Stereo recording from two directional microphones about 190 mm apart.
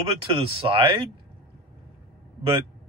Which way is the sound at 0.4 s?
30° right (ahead or behind).